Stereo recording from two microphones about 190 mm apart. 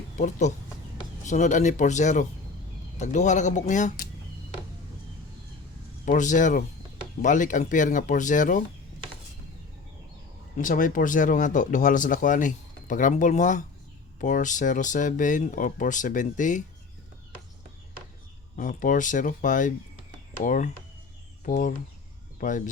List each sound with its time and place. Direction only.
0.2 s speech: 40° left (ahead or behind)
6.1 s speech: 40° left (ahead or behind)
10.6 s speech: 45° left (ahead or behind)
18.5 s speech: 45° left (ahead or behind)